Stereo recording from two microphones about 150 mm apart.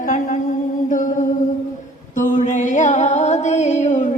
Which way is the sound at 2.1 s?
60° left (ahead or behind).